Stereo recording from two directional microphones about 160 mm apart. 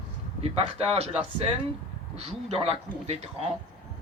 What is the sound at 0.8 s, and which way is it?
Speech, 40° right (ahead or behind).